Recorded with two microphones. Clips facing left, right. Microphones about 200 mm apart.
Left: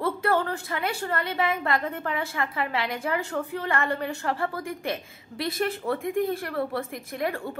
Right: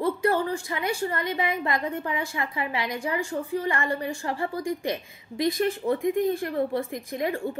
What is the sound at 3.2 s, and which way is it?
Speech, 65° left (ahead or behind).